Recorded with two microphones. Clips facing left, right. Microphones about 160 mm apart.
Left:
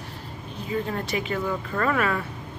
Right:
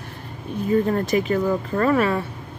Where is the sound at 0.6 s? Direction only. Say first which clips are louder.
Right 8 dB; 45° right (ahead or behind).